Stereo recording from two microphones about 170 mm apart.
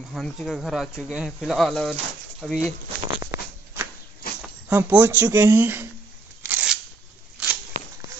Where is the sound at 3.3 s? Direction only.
15° right (ahead or behind).